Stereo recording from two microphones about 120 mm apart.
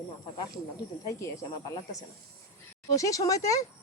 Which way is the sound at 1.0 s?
25° left (ahead or behind).